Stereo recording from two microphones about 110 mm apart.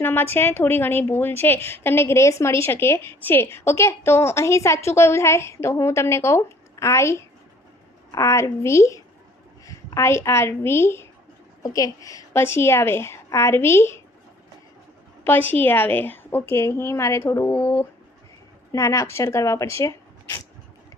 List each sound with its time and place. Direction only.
0.0 s a woman's voice: 20° left (ahead or behind)
15.2 s a woman's voice: 20° left (ahead or behind)